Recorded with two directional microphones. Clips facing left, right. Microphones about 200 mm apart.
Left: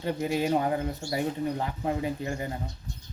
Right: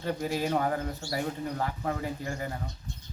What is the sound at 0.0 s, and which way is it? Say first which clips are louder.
Speech: left 2 dB; 20° left (ahead or behind).